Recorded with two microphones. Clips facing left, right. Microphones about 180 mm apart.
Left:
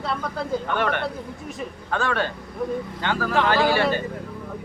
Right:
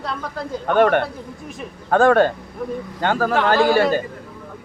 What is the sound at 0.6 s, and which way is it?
A man's voice, 50° right (ahead or behind).